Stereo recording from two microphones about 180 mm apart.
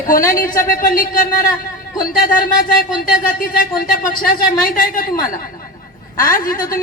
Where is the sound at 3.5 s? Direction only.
50° left (ahead or behind).